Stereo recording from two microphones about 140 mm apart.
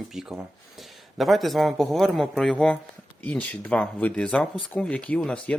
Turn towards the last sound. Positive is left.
turn(degrees=10)  # may be behind; listen again after turning